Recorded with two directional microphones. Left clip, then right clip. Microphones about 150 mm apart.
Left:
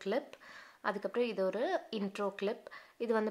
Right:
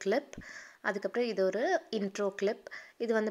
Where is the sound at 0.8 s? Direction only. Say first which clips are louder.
Right 2 dB; 15° right (ahead or behind).